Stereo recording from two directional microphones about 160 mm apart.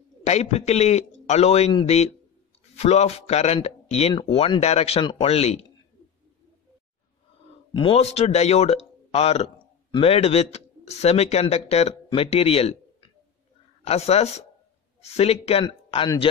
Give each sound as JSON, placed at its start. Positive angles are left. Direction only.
{"t": 0.2, "sound": "a man's voice", "side_deg": 45}
{"t": 7.7, "sound": "speech", "side_deg": 35}
{"t": 13.8, "sound": "speech", "side_deg": 40}